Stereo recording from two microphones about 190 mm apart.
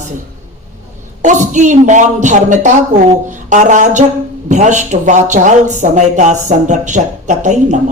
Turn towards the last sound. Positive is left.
turn(degrees=-40)  # may be behind; listen again after turning